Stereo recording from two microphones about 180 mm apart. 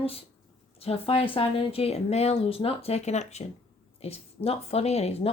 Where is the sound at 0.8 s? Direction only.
35° left (ahead or behind).